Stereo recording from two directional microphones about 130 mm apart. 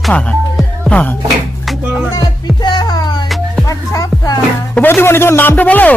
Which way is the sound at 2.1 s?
30° left (ahead or behind).